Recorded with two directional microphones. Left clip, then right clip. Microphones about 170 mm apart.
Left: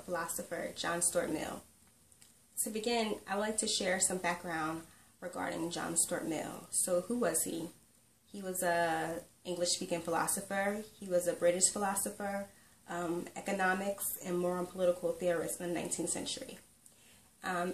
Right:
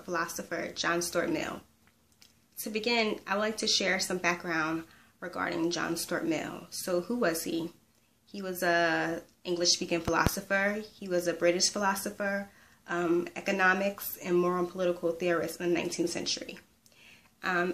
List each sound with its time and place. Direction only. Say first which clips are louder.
0.1 s speech: right 5 dB; 15° right (ahead or behind)
2.7 s speech: right 5 dB; 15° right (ahead or behind)